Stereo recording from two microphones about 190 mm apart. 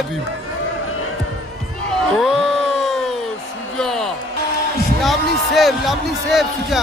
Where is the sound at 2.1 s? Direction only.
Centre (ahead or behind).